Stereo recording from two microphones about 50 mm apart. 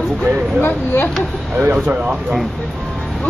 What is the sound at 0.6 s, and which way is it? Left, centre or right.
Speech, left.